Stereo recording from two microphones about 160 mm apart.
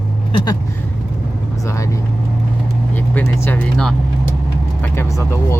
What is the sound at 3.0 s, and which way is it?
Vehicle, 10° left (ahead or behind).